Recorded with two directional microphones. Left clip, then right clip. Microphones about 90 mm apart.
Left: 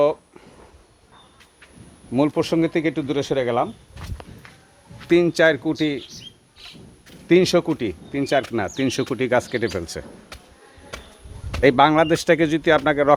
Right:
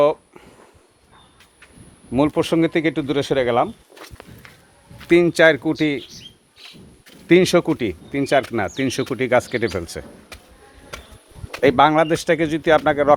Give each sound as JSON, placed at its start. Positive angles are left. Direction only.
{"t": 0.0, "sound": "a sound", "side_deg": -30}
{"t": 2.1, "sound": "speech", "side_deg": -30}
{"t": 3.2, "sound": "speech", "side_deg": -60}
{"t": 5.0, "sound": "speech", "side_deg": -35}
{"t": 7.3, "sound": "speech", "side_deg": -30}
{"t": 8.7, "sound": "speech", "side_deg": 0}
{"t": 9.3, "sound": "speech", "side_deg": -15}
{"t": 9.7, "sound": "speech", "side_deg": 0}
{"t": 11.6, "sound": "speech", "side_deg": 5}
{"t": 11.9, "sound": "speech", "side_deg": 20}